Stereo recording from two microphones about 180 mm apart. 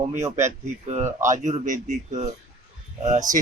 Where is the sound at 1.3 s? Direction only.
45° right (ahead or behind).